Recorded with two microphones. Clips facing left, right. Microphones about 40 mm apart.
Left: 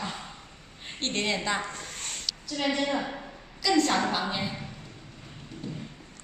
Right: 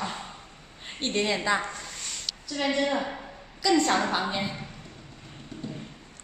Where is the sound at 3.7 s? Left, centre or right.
Centre.